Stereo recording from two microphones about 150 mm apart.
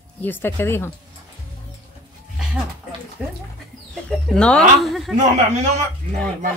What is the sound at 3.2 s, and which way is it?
Speech, 5° right (ahead or behind).